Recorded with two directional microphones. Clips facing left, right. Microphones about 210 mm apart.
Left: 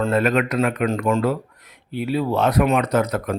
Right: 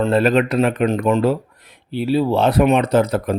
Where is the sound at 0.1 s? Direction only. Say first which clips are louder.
Right 4 dB; 30° right (ahead or behind).